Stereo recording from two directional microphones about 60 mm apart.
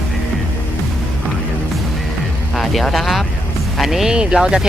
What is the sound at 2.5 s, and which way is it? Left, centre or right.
Speech, centre.